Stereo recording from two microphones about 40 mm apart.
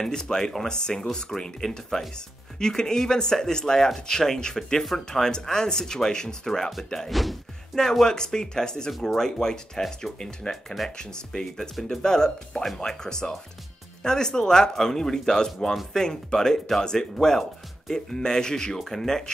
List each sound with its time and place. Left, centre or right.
0.0 s speech: centre
7.1 s a sound: centre
8.0 s speech: centre
10.5 s speech: centre
11.0 s speech: centre